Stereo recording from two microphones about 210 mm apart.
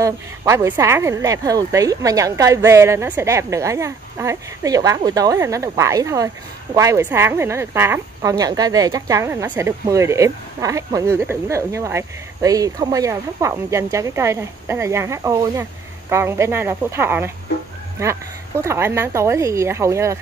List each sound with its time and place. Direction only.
0.0 s speech: 15° right (ahead or behind)
18.6 s speech: 10° right (ahead or behind)